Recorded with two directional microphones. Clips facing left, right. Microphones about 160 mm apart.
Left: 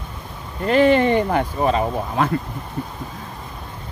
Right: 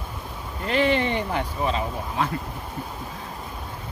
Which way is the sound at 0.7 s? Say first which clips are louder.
Left 7 dB; 45° left (ahead or behind).